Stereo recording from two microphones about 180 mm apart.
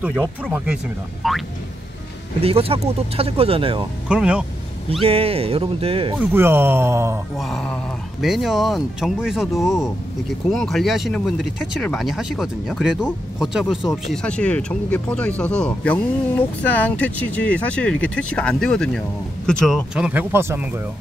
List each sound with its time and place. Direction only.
0.4 s speech: 10° right (ahead or behind)
2.4 s speech: 35° right (ahead or behind)
4.1 s speech: 5° right (ahead or behind)
5.0 s speech: 30° right (ahead or behind)
6.3 s speech: 10° right (ahead or behind)
7.3 s speech: centre (ahead or behind)